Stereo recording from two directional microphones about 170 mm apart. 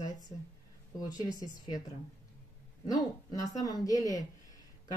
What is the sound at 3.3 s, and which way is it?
Speech, 20° left (ahead or behind).